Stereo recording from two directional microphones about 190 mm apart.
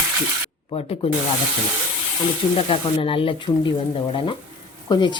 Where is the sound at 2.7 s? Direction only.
30° left (ahead or behind).